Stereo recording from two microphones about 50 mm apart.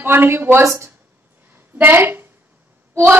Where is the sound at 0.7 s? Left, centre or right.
Right.